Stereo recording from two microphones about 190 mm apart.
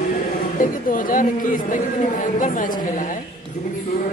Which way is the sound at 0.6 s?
45° left (ahead or behind).